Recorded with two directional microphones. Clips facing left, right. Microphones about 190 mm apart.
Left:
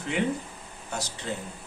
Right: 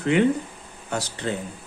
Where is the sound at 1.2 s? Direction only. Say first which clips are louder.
Right 6 dB; 70° right (ahead or behind).